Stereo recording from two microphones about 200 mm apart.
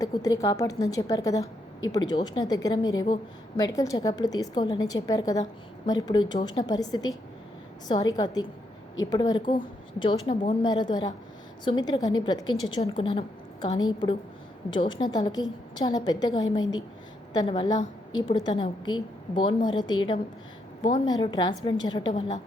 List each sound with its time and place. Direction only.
0.0 s a woman's voice: 15° left (ahead or behind)